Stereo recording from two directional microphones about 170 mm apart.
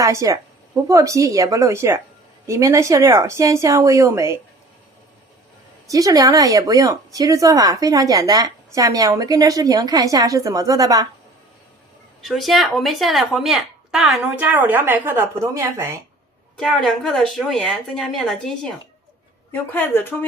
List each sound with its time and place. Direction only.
0.0 s speech: 20° right (ahead or behind)
5.9 s speech: 20° right (ahead or behind)
12.2 s speech: centre (ahead or behind); by 16.0 s 15° right (ahead or behind)
16.6 s speech: centre (ahead or behind)
19.5 s speech: 10° left (ahead or behind)